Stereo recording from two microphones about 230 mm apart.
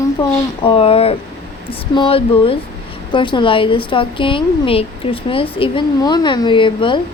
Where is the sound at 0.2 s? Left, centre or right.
Left.